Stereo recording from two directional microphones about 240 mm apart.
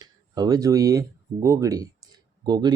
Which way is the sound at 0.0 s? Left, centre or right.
Centre.